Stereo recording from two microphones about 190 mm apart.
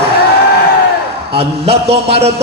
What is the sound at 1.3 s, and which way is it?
A man's voice, 30° right (ahead or behind).